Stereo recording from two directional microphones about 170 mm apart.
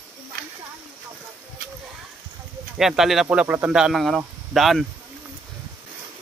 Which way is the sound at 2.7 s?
Centre (ahead or behind).